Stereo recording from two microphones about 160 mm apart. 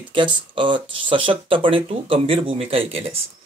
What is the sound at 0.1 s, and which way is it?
Speech, 30° right (ahead or behind).